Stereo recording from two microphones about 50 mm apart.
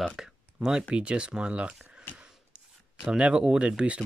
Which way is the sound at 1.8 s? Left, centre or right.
Centre.